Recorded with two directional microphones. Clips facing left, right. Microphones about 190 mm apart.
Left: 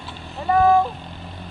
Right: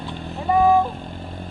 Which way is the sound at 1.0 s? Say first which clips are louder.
Right 4 dB; 50° right (ahead or behind).